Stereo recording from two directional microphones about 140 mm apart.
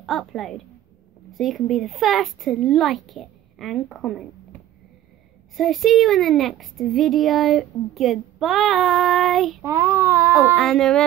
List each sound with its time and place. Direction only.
0.0 s speech: centre (ahead or behind)
5.6 s speech: centre (ahead or behind)
9.6 s speech: 20° right (ahead or behind)
10.5 s speech: centre (ahead or behind)